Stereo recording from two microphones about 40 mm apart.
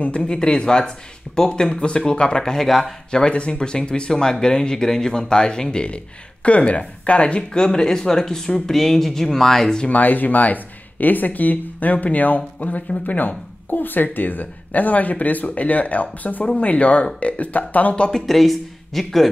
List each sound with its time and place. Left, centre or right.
0.0 s speech: left; by 2.9 s centre
3.1 s speech: left
6.4 s speech: left; by 9.8 s centre
9.8 s speech: left
13.7 s speech: left
18.2 s speech: centre